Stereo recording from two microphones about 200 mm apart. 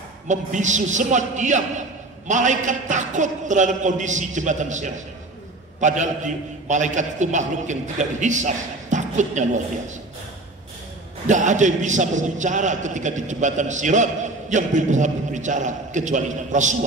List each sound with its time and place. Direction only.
0.3 s a man's voice: 35° right (ahead or behind)
11.2 s a man's voice: 35° right (ahead or behind)